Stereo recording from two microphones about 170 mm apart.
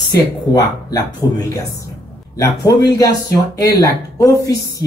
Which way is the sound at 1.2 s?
25° left (ahead or behind).